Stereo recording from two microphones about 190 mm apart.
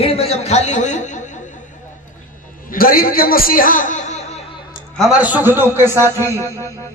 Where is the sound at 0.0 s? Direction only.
30° left (ahead or behind).